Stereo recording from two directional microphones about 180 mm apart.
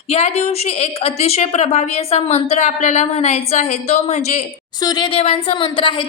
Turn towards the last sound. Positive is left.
turn(degrees=30)  # may be behind; listen again after turning